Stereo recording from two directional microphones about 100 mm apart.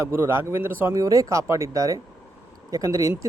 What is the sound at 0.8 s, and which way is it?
Speech, 35° right (ahead or behind).